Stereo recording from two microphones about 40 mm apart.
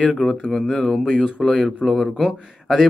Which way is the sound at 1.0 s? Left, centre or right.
Centre.